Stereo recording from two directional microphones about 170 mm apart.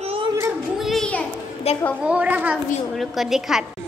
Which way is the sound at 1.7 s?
35° left (ahead or behind).